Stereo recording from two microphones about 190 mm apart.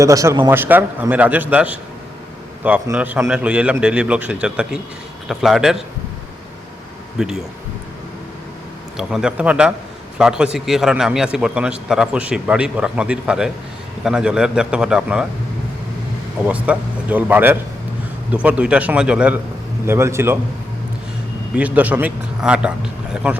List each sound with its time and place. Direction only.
0.0 s a man's voice: 15° right (ahead or behind)
7.2 s a man's voice: centre (ahead or behind)
9.0 s a man's voice: 5° right (ahead or behind)
16.5 s a man's voice: 5° right (ahead or behind)
21.5 s a man's voice: 10° right (ahead or behind)